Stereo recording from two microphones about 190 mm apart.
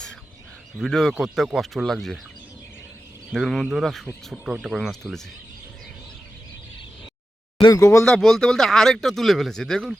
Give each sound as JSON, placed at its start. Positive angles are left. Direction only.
{"t": 0.8, "sound": "speech", "side_deg": 0}
{"t": 3.3, "sound": "speech", "side_deg": 0}
{"t": 7.6, "sound": "speech", "side_deg": 15}
{"t": 8.0, "sound": "speech", "side_deg": 0}